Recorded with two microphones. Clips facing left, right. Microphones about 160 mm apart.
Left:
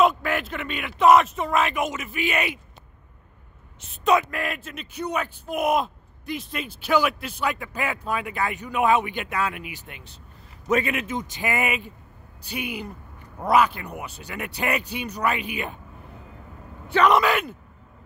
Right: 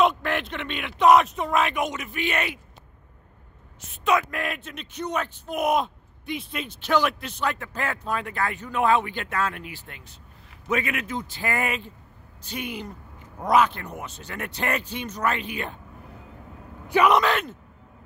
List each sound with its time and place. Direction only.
0.0 s speech: 5° left (ahead or behind)
3.9 s speech: 35° left (ahead or behind)
4.3 s speech: centre (ahead or behind)
10.7 s a man's voice: 30° left (ahead or behind); by 15.8 s 10° left (ahead or behind)
16.8 s speech: 15° right (ahead or behind)
17.1 s speech: 10° left (ahead or behind)